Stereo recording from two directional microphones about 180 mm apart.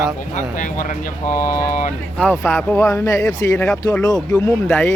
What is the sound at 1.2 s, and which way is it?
Speech, 15° left (ahead or behind).